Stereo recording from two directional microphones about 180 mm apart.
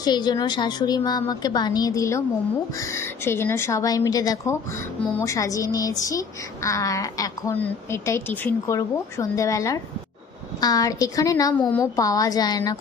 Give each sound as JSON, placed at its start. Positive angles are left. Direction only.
{"t": 0.0, "sound": "a woman's voice", "side_deg": 25}